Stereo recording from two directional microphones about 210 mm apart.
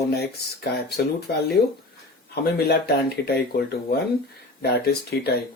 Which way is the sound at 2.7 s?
50° left (ahead or behind).